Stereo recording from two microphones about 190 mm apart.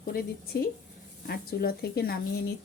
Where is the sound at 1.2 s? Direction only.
55° left (ahead or behind).